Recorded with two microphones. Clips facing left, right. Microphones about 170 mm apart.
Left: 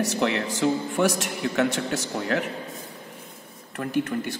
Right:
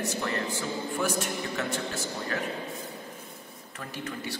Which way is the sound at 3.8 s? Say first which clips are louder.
Left 11 dB; 55° left (ahead or behind).